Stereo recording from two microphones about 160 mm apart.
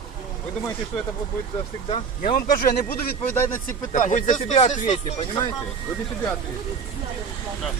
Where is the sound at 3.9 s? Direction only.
50° left (ahead or behind).